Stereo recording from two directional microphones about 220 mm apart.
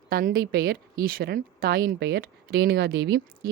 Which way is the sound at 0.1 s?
40° right (ahead or behind).